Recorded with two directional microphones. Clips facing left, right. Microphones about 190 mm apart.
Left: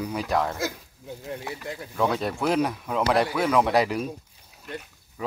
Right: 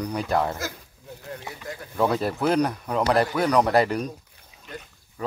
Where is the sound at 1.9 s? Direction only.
Centre (ahead or behind).